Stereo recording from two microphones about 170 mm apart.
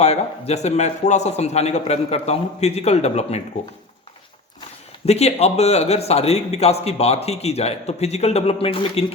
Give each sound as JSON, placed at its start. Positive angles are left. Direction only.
{"t": 0.0, "sound": "a man's voice", "side_deg": 40}
{"t": 5.0, "sound": "a man's voice", "side_deg": 40}